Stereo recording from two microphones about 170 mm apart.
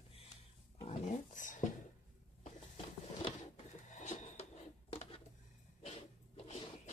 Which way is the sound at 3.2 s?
40° left (ahead or behind).